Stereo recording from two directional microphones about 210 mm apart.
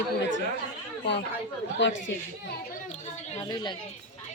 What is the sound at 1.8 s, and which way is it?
Speech, 60° left (ahead or behind).